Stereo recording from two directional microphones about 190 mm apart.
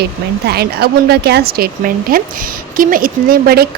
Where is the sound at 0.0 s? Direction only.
55° right (ahead or behind).